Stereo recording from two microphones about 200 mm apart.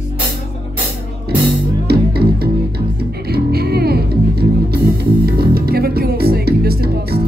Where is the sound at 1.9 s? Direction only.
50° right (ahead or behind).